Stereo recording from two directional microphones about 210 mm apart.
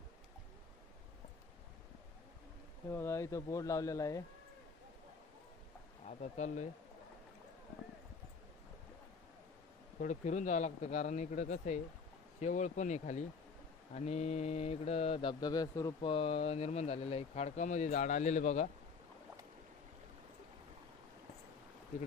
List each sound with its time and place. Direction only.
2.9 s speech: 15° left (ahead or behind)
6.1 s speech: 35° left (ahead or behind)
10.0 s speech: 35° left (ahead or behind)